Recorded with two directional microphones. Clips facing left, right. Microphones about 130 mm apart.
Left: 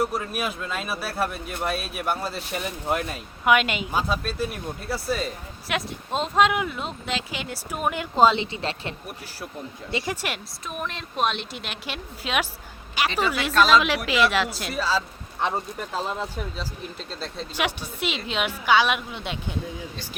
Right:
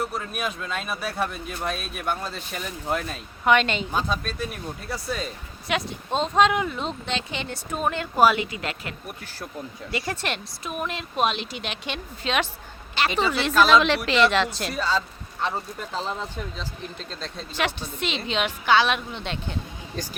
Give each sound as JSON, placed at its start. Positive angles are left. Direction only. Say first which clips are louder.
{"t": 0.0, "sound": "speech", "louder": "left 3 dB", "side_deg": 5}
{"t": 8.1, "sound": "a woman's voice", "louder": "left 1 dB", "side_deg": 25}
{"t": 9.9, "sound": "speech", "louder": "even", "side_deg": 10}
{"t": 13.5, "sound": "speech", "louder": "right 1 dB", "side_deg": 0}
{"t": 15.4, "sound": "a woman's voice", "louder": "left 2 dB", "side_deg": 20}
{"t": 17.1, "sound": "a woman's voice", "louder": "left 2 dB", "side_deg": 5}